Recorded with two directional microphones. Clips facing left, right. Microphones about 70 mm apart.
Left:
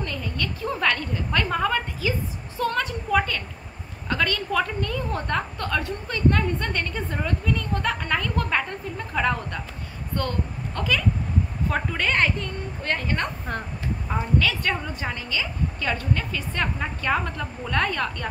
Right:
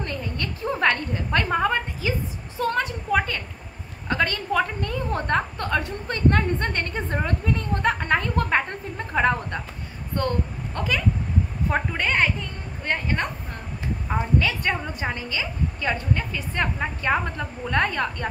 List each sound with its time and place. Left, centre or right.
0.0 s a woman's voice: right